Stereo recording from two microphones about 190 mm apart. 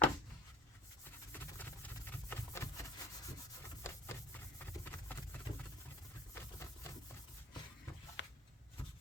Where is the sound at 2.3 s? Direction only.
15° left (ahead or behind).